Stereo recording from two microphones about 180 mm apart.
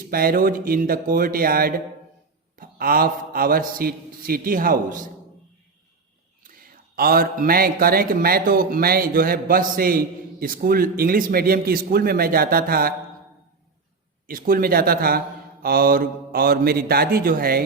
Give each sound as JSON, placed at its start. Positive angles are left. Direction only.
{"t": 0.1, "sound": "a man's voice", "side_deg": -55}
{"t": 6.9, "sound": "a man's voice", "side_deg": -55}
{"t": 14.3, "sound": "a man's voice", "side_deg": -50}